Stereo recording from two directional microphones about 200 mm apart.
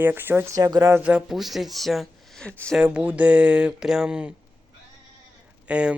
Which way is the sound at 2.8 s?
5° right (ahead or behind).